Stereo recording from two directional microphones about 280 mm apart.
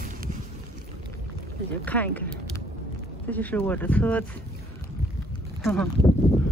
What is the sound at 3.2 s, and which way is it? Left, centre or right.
Speech, centre.